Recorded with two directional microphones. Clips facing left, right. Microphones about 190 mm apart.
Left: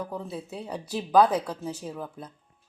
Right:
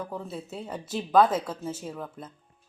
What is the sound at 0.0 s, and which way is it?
A woman's voice, centre (ahead or behind).